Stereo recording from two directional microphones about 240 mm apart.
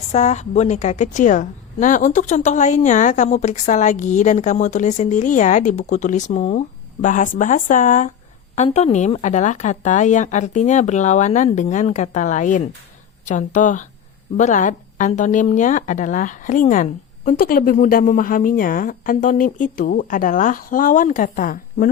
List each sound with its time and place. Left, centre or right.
0.1 s a woman's voice: left